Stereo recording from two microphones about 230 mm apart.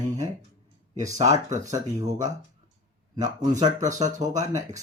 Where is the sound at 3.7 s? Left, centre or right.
Right.